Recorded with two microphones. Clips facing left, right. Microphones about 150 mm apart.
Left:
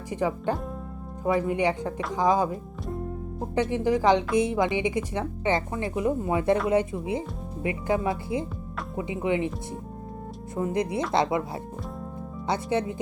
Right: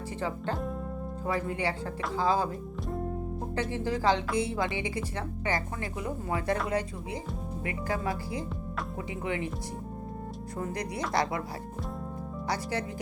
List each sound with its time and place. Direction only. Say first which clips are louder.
0.1 s speech: left 7 dB; 15° left (ahead or behind)
3.5 s a woman's voice: left 8 dB; 20° left (ahead or behind)
10.6 s a woman's voice: left 7 dB; 25° left (ahead or behind)